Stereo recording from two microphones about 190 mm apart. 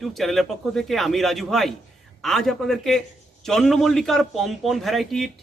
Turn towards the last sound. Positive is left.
turn(degrees=0)  # may be behind; listen again after turning